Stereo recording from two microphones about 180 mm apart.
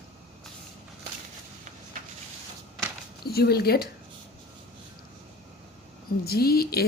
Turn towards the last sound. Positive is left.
turn(degrees=60)  # may be behind; listen again after turning